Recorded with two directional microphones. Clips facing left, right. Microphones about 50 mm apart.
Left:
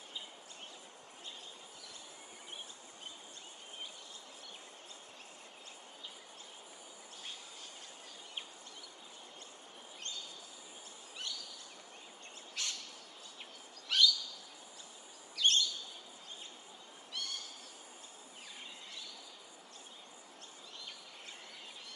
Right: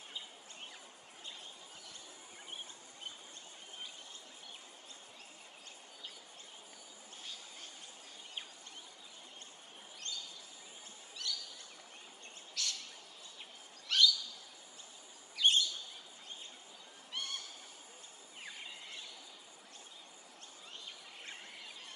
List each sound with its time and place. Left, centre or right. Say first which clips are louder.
11.2 s a sound: right 2 dB; left
12.6 s bird: even; left
13.8 s bird: even; centre
15.3 s bird: right 1 dB; centre
17.1 s neigh: right 1 dB; right